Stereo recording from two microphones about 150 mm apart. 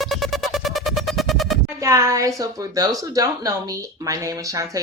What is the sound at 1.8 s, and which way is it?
Speech, 20° right (ahead or behind).